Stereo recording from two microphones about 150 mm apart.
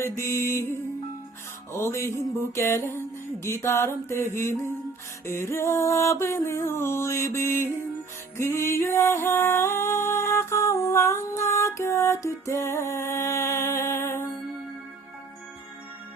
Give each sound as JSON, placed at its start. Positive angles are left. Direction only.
{"t": 0.0, "sound": "music", "side_deg": 20}
{"t": 1.7, "sound": "music", "side_deg": 15}